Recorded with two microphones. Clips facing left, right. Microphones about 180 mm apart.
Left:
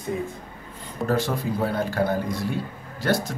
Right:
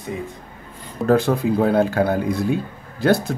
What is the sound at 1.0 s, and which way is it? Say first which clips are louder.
Speech: right 8 dB; 55° right (ahead or behind).